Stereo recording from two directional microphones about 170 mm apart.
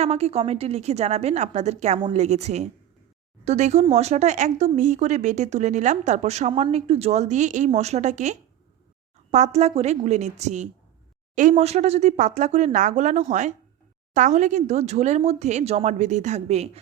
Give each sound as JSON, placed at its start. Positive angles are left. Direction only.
{"t": 0.0, "sound": "a woman's voice", "side_deg": -40}